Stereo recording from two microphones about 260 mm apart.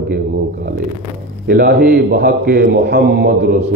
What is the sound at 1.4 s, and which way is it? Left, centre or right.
A man's voice, right.